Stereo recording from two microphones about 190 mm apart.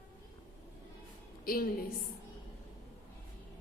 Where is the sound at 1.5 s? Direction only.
50° left (ahead or behind).